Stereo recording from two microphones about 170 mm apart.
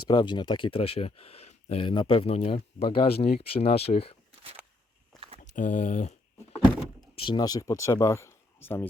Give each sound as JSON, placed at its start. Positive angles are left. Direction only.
{"t": 0.1, "sound": "speech", "side_deg": 25}
{"t": 5.4, "sound": "a sound", "side_deg": 50}
{"t": 7.2, "sound": "speech", "side_deg": 25}